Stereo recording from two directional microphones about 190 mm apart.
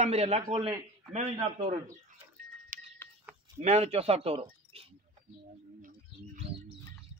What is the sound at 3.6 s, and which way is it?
Speech, 35° right (ahead or behind).